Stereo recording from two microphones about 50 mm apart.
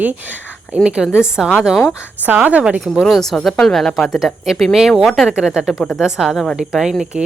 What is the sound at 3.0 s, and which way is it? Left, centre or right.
Speech, centre.